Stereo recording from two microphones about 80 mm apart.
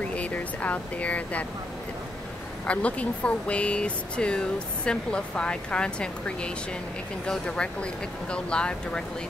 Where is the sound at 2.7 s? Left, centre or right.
Centre.